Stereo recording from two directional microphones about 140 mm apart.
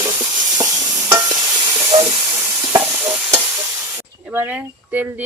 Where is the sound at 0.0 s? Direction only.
25° right (ahead or behind).